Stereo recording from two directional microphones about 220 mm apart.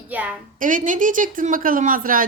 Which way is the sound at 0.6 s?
35° right (ahead or behind).